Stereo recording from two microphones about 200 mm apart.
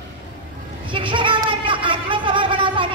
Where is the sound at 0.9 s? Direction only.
25° right (ahead or behind).